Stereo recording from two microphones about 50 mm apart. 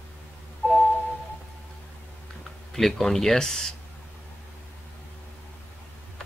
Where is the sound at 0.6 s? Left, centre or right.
Left.